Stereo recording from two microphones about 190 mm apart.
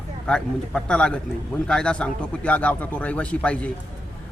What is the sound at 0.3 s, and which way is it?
Speech, 5° left (ahead or behind).